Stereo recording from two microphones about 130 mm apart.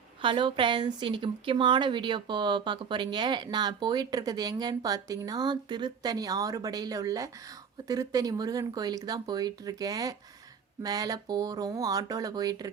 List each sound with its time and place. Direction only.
0.2 s speech: 40° right (ahead or behind)